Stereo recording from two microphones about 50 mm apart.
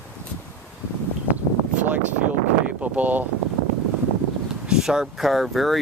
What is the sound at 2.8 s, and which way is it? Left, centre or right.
Speech, right.